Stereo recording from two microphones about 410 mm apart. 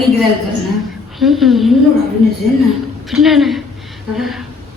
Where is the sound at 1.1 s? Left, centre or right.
Centre.